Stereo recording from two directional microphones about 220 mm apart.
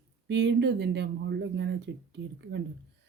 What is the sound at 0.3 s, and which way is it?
A woman's voice, 55° right (ahead or behind).